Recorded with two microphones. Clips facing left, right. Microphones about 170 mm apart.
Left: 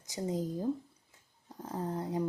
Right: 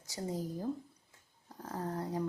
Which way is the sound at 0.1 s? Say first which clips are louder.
Left 4 dB; 20° left (ahead or behind).